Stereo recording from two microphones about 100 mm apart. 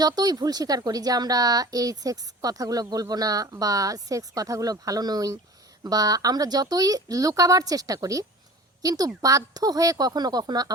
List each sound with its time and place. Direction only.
0.0 s a woman's voice: 40° right (ahead or behind)